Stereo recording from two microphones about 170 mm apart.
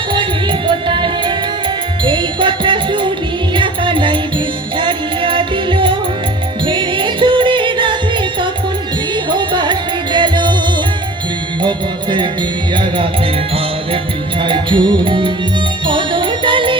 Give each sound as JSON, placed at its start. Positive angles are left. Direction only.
{"t": 0.1, "sound": "music", "side_deg": -30}
{"t": 12.7, "sound": "music", "side_deg": -30}
{"t": 14.4, "sound": "music", "side_deg": -30}